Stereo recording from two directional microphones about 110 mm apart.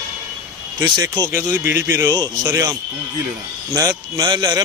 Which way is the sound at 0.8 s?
35° right (ahead or behind).